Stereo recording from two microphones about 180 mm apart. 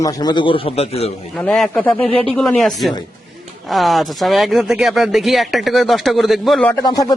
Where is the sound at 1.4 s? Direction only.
5° left (ahead or behind).